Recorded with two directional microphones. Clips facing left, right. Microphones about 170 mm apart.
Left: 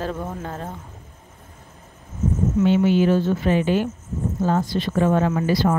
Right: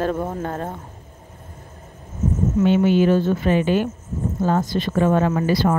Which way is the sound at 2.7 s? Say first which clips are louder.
Right 2 dB; 55° right (ahead or behind).